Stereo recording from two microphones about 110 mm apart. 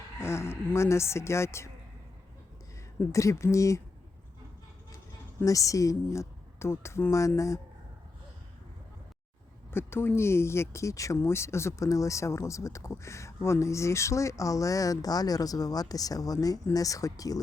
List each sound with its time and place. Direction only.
0.2 s speech: 25° left (ahead or behind)
3.1 s speech: 30° left (ahead or behind)
5.5 s speech: 30° left (ahead or behind)
9.7 s speech: 20° left (ahead or behind)